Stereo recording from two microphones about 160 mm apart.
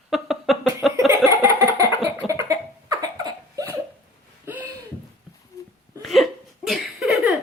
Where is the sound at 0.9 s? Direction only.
20° right (ahead or behind).